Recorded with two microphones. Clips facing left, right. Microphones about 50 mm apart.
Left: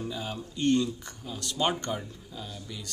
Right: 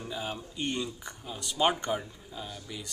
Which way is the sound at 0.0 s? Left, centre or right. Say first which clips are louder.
Left 1 dB; centre.